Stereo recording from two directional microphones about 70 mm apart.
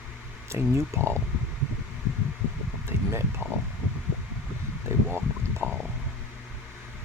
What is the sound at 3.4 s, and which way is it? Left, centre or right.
Speech, right.